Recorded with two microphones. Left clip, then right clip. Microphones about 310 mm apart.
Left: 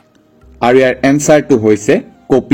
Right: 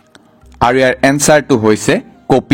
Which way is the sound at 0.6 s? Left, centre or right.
Right.